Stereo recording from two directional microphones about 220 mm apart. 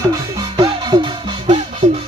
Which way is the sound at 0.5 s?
20° right (ahead or behind).